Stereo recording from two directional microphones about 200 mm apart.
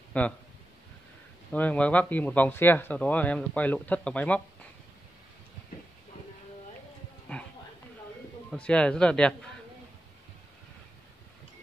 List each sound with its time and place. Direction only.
0.1 s speech: 5° left (ahead or behind)
1.5 s speech: 5° left (ahead or behind)
7.3 s a sound: 5° left (ahead or behind)
8.5 s a man's voice: 5° left (ahead or behind)